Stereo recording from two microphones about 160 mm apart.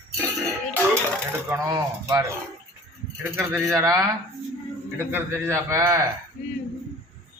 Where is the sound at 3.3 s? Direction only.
15° right (ahead or behind).